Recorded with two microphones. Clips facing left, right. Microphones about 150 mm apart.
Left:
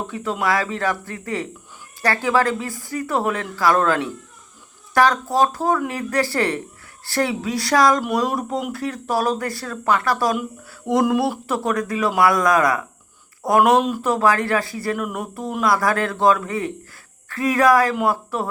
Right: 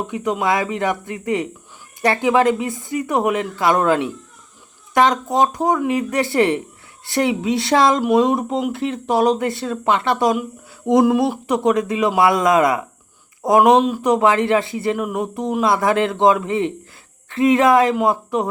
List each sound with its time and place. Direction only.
0.1 s speech: 20° right (ahead or behind)